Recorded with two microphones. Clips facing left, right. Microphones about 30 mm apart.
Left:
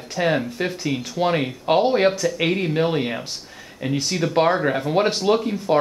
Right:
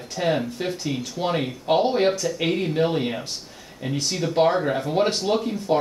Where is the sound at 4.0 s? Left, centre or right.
Centre.